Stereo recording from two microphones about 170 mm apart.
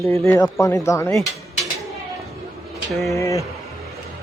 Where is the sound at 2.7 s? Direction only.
Centre (ahead or behind).